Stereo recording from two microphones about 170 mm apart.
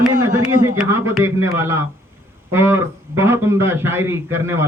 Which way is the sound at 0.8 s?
15° right (ahead or behind).